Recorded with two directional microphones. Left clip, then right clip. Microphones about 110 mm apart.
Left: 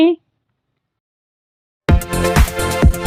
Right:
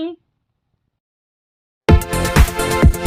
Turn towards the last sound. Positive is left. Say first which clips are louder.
# right 1 dB
turn(degrees=0)  # may be behind; listen again after turning